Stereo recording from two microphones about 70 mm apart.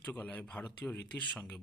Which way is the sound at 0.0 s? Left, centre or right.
Left.